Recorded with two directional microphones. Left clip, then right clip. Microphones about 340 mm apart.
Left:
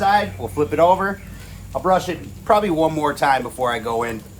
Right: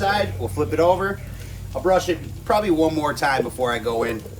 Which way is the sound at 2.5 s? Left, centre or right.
Centre.